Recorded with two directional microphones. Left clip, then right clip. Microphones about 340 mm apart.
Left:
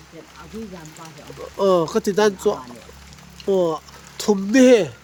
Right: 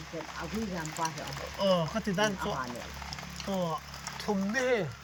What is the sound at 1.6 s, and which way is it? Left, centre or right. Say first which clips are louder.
Speech: left 11 dB; centre.